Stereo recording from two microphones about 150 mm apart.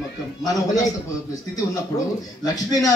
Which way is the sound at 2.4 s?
25° left (ahead or behind).